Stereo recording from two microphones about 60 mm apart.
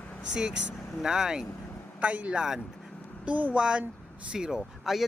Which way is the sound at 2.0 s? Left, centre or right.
Right.